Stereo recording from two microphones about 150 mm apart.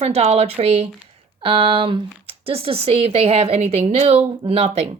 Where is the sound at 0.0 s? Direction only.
45° right (ahead or behind).